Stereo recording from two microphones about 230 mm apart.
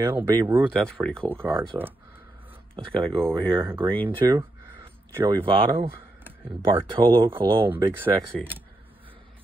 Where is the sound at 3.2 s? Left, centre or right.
Centre.